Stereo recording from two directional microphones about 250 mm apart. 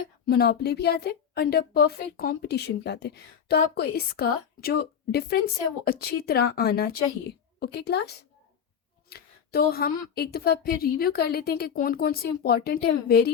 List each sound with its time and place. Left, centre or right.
0.3 s a woman's voice: left